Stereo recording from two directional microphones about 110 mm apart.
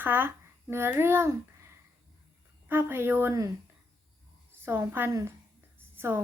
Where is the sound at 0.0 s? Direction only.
20° right (ahead or behind).